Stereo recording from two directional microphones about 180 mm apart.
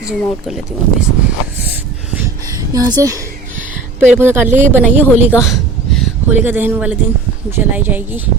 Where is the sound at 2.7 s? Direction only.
20° right (ahead or behind).